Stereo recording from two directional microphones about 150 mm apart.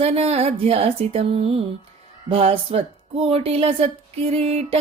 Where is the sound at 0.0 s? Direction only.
40° right (ahead or behind).